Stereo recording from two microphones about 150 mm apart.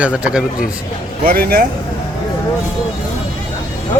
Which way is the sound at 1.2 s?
75° right (ahead or behind).